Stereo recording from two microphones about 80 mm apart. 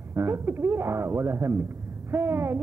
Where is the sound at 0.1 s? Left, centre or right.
Right.